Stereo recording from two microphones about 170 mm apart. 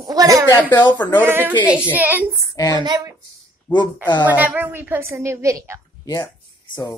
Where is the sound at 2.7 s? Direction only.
25° right (ahead or behind).